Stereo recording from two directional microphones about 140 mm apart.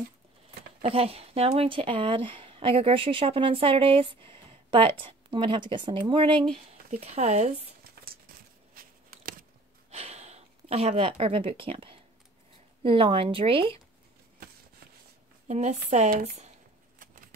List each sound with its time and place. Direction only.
0.8 s speech: 45° right (ahead or behind)
6.9 s speech: 50° right (ahead or behind)
8.7 s a sound: 90° right
9.8 s a sound: 50° right (ahead or behind)
12.8 s speech: 40° right (ahead or behind)
15.4 s speech: 55° right (ahead or behind)